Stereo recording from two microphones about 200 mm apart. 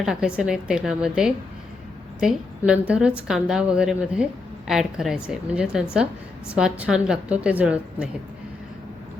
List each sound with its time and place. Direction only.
0.0 s a woman's voice: 5° right (ahead or behind)